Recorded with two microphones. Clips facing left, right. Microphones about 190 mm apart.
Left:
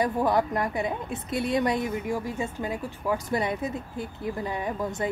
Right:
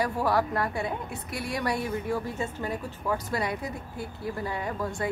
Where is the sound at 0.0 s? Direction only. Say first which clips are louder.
Left 2 dB; 20° left (ahead or behind).